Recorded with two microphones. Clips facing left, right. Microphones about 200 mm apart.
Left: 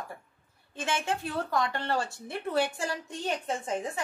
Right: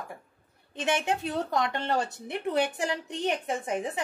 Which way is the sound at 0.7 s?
20° right (ahead or behind).